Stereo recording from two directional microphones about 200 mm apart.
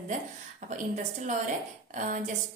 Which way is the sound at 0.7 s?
40° right (ahead or behind).